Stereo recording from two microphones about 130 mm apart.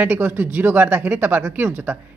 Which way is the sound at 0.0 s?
15° right (ahead or behind).